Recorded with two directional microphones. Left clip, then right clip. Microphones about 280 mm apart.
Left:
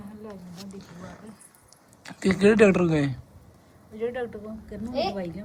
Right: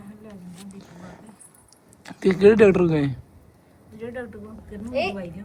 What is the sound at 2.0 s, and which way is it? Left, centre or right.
Speech, centre.